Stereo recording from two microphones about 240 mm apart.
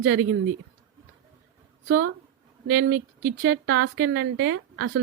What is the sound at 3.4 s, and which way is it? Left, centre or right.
A woman's voice, right.